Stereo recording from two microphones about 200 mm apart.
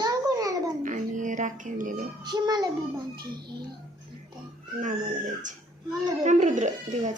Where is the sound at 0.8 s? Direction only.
40° right (ahead or behind).